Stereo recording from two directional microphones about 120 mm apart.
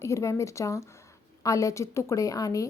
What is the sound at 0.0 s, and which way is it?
A woman's voice, 25° left (ahead or behind).